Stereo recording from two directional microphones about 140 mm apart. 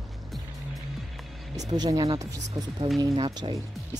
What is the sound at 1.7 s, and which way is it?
Speech, 30° right (ahead or behind).